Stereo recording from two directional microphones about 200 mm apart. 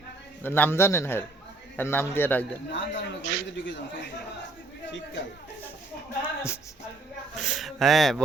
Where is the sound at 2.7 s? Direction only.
65° left (ahead or behind).